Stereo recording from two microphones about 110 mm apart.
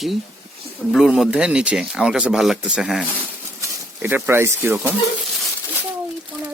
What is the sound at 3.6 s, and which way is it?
Speech, 20° right (ahead or behind).